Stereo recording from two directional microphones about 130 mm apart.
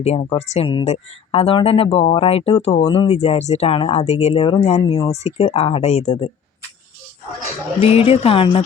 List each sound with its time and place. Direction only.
0.0 s speech: 55° left (ahead or behind)
4.8 s speech: 40° left (ahead or behind)
5.1 s speech: 55° left (ahead or behind)
7.8 s speech: 50° left (ahead or behind)